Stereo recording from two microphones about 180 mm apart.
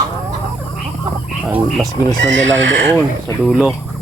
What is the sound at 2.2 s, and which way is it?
Speech, 90° right.